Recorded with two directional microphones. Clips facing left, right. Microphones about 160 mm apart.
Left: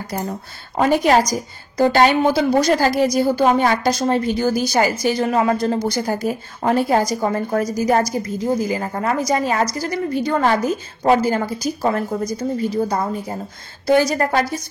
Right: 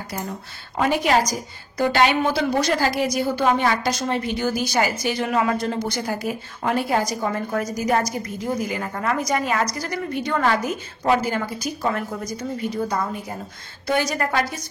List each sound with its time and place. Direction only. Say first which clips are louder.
0.1 s a woman's voice: left 5 dB; 40° left (ahead or behind)